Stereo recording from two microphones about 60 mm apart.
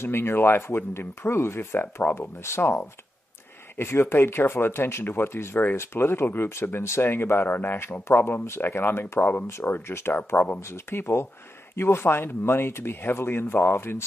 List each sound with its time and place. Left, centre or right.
0.0 s speech: left
9.2 s speech: left
9.5 s speech: left
10.6 s speech: left